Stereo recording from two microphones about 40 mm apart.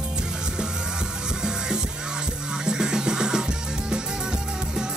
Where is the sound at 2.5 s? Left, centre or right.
Centre.